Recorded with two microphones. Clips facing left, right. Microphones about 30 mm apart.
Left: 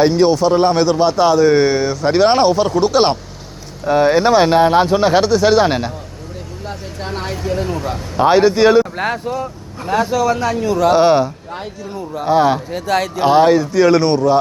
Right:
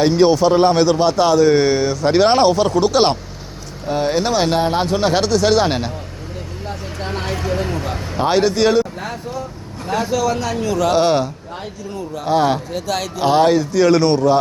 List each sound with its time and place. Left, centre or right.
0.0 s a man's voice: centre
3.8 s a man's voice: centre
4.2 s speech: left
4.4 s a man's voice: centre
7.1 s a man's voice: centre
9.8 s a man's voice: centre
10.1 s a man's voice: centre
12.7 s speech: left
13.2 s a man's voice: centre